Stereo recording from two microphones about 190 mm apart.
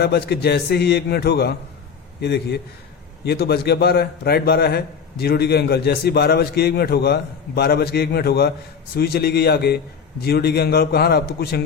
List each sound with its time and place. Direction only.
0.0 s a man's voice: 60° left (ahead or behind)